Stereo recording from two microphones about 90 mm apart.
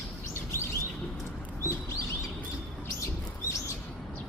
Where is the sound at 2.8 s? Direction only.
30° left (ahead or behind).